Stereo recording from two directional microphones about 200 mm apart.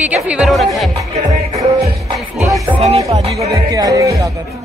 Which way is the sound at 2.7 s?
10° right (ahead or behind).